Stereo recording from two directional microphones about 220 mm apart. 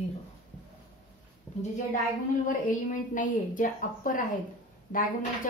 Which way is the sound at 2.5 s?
35° left (ahead or behind).